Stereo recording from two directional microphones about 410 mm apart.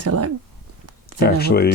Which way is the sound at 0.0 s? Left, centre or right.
Right.